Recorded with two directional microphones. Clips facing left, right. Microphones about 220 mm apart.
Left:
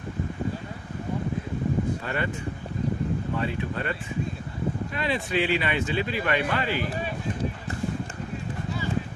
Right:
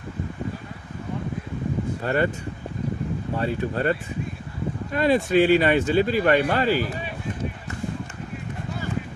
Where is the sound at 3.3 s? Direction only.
40° right (ahead or behind).